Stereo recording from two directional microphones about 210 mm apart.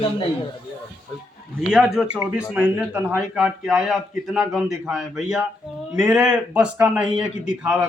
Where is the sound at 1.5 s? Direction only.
Centre (ahead or behind).